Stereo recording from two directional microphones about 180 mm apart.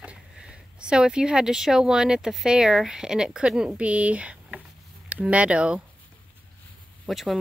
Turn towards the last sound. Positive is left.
turn(degrees=0)  # may be behind; listen again after turning